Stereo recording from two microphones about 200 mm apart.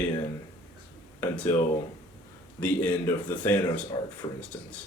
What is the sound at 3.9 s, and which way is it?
Speech, 20° left (ahead or behind).